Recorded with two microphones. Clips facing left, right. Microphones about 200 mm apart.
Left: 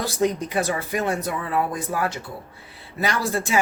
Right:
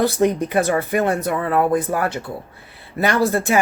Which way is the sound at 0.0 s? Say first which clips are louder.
Right 6 dB; 60° right (ahead or behind).